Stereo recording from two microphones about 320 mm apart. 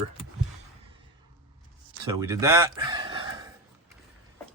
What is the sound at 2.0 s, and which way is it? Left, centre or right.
Speech, centre.